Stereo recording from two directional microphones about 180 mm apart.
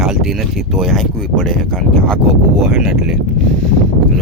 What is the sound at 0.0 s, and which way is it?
Speech, centre (ahead or behind).